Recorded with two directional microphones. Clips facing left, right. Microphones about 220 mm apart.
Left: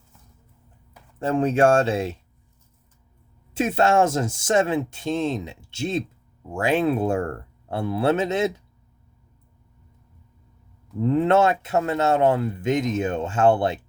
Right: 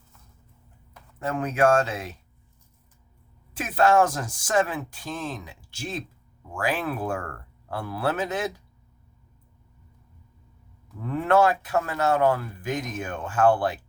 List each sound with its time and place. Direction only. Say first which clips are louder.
1.2 s speech: left 4 dB; 30° left (ahead or behind)
3.5 s speech: left 1 dB; 25° left (ahead or behind)
11.0 s speech: left 3 dB; 25° left (ahead or behind)